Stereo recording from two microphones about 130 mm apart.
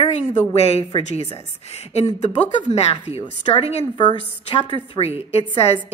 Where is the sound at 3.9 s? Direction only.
40° left (ahead or behind).